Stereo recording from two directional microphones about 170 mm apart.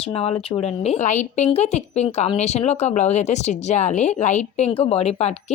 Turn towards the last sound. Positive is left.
turn(degrees=40)  # may be behind; listen again after turning